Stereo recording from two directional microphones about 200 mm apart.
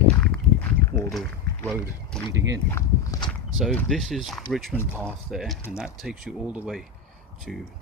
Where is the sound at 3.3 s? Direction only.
5° left (ahead or behind).